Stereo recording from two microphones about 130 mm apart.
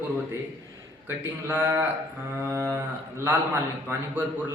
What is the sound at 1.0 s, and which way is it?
A man's voice, 20° right (ahead or behind).